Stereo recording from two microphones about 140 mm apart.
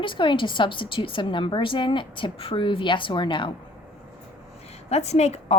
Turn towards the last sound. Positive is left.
turn(degrees=50)  # may be behind; listen again after turning